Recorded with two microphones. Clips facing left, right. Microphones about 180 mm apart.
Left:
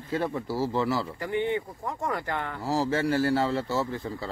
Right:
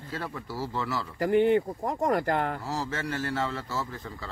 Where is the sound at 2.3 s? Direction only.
40° right (ahead or behind).